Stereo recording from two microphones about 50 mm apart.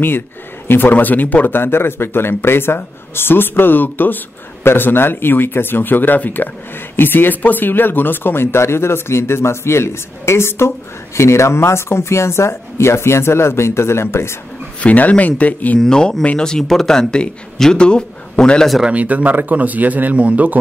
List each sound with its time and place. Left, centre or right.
0.7 s speech: left
14.8 s speech: left
15.8 s speech: centre
18.9 s speech: right